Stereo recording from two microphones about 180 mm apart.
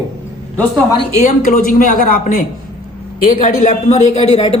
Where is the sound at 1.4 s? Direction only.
50° left (ahead or behind).